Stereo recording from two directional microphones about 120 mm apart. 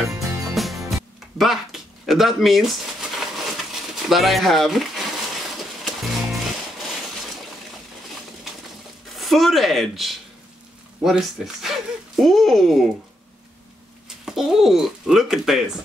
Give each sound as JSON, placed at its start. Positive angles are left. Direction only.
{"t": 0.1, "sound": "music", "side_deg": -25}
{"t": 1.4, "sound": "a sound", "side_deg": 0}
{"t": 9.1, "sound": "speech", "side_deg": 0}
{"t": 14.0, "sound": "speech", "side_deg": -5}